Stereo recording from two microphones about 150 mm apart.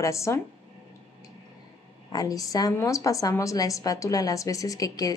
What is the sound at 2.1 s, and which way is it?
A woman's voice, 25° left (ahead or behind).